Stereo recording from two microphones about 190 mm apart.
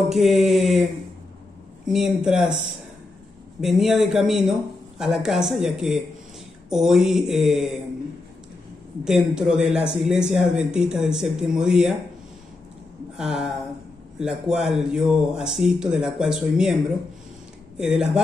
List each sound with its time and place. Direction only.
0.1 s speech: centre (ahead or behind)
1.9 s speech: centre (ahead or behind)
3.6 s speech: centre (ahead or behind)
9.0 s speech: 5° right (ahead or behind)
13.2 s speech: centre (ahead or behind)
17.7 s speech: 5° right (ahead or behind)